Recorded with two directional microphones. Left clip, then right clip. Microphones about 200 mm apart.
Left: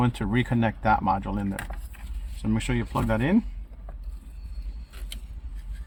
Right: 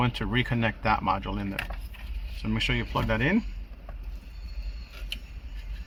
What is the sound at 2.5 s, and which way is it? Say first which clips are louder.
Speech: right 1 dB; 45° left (ahead or behind).